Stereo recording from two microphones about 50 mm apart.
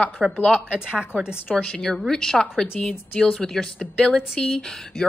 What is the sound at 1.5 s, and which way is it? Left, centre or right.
A woman's voice, centre.